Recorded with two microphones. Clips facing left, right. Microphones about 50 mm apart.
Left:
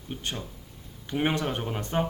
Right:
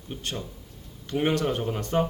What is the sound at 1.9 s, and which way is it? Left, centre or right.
Speech, centre.